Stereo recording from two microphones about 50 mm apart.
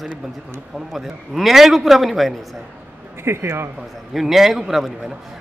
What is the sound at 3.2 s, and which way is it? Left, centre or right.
Speech, right.